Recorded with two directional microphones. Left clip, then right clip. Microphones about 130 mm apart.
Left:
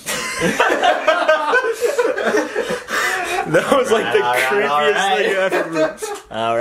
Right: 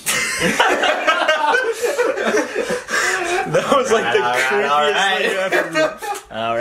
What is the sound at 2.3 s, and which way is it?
Chuckle, 10° left (ahead or behind).